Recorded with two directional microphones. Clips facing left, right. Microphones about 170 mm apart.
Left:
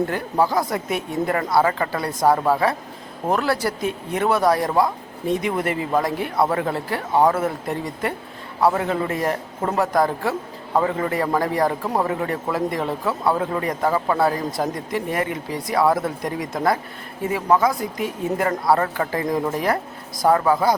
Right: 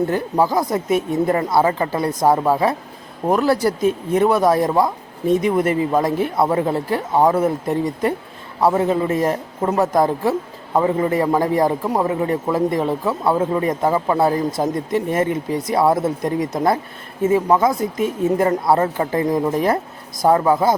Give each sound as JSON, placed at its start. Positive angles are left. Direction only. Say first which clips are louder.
{"t": 0.1, "sound": "a man's voice", "louder": "right 3 dB", "side_deg": -20}